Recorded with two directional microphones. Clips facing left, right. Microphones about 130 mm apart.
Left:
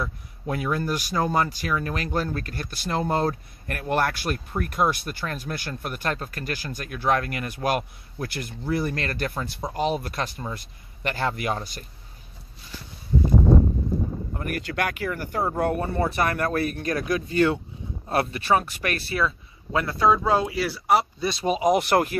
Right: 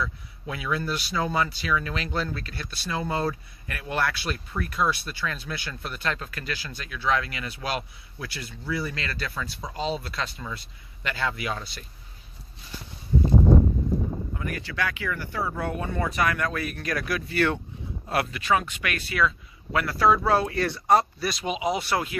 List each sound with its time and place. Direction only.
0.0 s speech: 45° left (ahead or behind)
14.3 s speech: 50° left (ahead or behind)
17.1 s speech: 20° left (ahead or behind); by 21.1 s 5° left (ahead or behind)
21.2 s speech: 25° left (ahead or behind)
21.5 s speech: 45° left (ahead or behind)